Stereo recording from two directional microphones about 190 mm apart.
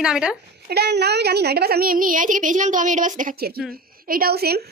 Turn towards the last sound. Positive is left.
turn(degrees=-55)  # may be behind; listen again after turning